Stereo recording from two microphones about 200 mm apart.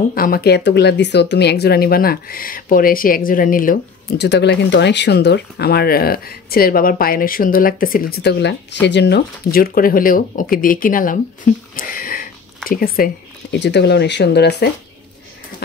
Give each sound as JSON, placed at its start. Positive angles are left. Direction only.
{"t": 0.1, "sound": "speech", "side_deg": 45}
{"t": 4.2, "sound": "speech", "side_deg": 60}